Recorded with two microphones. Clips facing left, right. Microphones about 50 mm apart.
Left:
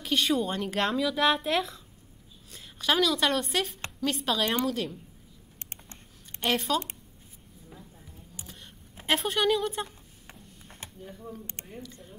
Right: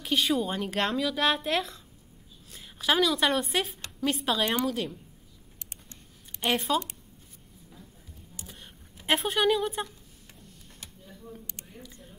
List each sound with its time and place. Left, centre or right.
0.0 s speech: centre
5.6 s computer keyboard: left
6.4 s speech: centre
8.5 s a sound: centre
9.0 s speech: centre
9.8 s a sound: left
11.8 s speech: centre